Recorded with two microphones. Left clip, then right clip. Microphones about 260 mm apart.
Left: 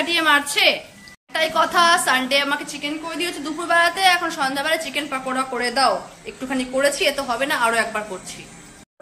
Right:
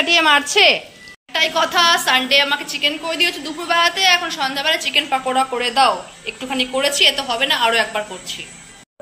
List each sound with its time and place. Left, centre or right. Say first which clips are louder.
0.0 s a woman's voice: right 4 dB; centre
1.3 s a woman's voice: right 2 dB; centre